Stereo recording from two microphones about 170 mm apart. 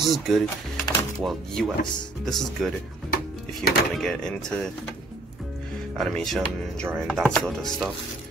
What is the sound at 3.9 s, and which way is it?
Speech, 5° left (ahead or behind).